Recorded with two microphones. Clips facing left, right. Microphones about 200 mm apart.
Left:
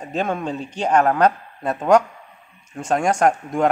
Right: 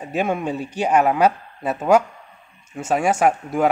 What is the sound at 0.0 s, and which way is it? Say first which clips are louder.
A woman's voice: right 1 dB; 10° right (ahead or behind).